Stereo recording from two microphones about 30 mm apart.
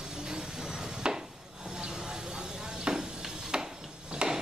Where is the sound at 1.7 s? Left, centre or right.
Right.